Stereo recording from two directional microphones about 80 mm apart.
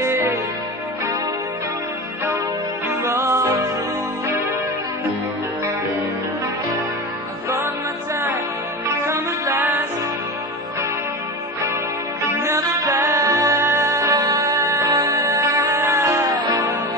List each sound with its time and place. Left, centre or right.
0.0 s music: right
2.9 s music: right
7.4 s music: right
9.0 s music: right
12.2 s music: right
13.6 s music: right